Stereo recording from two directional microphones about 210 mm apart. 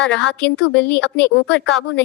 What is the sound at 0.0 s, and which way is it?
A woman's voice, 60° left (ahead or behind).